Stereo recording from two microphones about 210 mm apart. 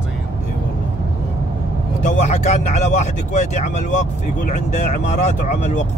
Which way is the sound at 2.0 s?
35° left (ahead or behind).